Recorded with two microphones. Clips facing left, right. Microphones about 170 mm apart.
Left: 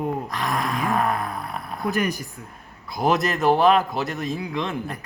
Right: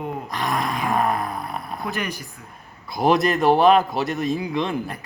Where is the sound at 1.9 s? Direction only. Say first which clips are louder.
Left 7 dB; 45° left (ahead or behind).